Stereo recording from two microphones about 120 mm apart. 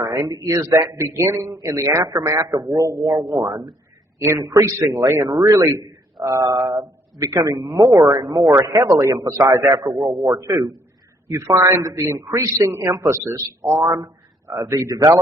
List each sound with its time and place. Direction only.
0.0 s a man's voice: 30° right (ahead or behind)
6.6 s speech: centre (ahead or behind)
7.2 s a man's voice: 25° right (ahead or behind)
9.7 s speech: 35° right (ahead or behind)
10.2 s a man's voice: 25° right (ahead or behind)
12.9 s speech: 30° right (ahead or behind)
13.2 s a man's voice: 20° right (ahead or behind)